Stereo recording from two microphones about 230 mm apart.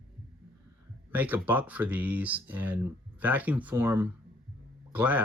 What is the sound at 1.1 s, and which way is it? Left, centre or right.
Speech, centre.